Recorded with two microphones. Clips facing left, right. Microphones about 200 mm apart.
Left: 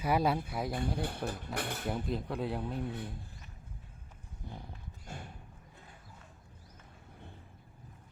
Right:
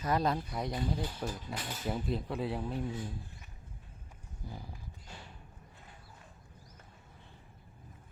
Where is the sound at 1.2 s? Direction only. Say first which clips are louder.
Left 3 dB; 60° left (ahead or behind).